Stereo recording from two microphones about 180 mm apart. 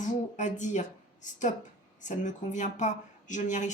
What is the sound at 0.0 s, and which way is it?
Speech, 45° left (ahead or behind).